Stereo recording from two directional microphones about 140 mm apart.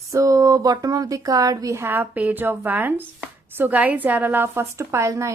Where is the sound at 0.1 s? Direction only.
25° right (ahead or behind).